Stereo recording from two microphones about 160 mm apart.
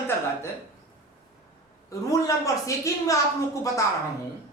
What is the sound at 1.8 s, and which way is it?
Speech, 20° left (ahead or behind).